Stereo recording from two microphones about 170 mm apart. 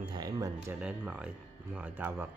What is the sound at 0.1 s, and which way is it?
Music, 20° right (ahead or behind).